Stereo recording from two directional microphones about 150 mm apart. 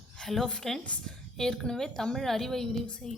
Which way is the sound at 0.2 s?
5° left (ahead or behind).